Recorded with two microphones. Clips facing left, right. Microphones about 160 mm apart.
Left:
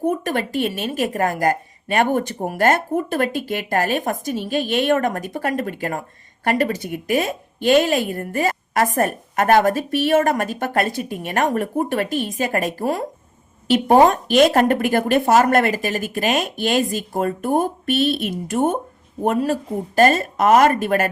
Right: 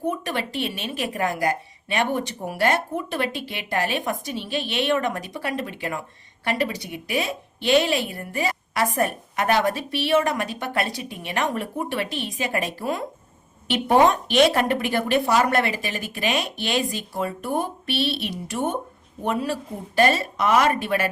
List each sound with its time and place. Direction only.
0.1 s speech: 45° left (ahead or behind)